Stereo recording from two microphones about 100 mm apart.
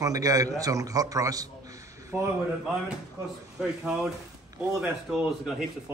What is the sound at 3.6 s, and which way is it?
Speech, 5° right (ahead or behind).